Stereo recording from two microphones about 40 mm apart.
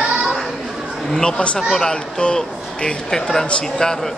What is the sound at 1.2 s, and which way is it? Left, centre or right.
Speech, left.